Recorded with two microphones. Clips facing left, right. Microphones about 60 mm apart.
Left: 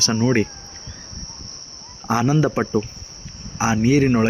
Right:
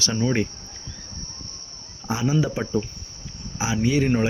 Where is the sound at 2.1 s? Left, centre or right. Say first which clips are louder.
Left 5 dB; left.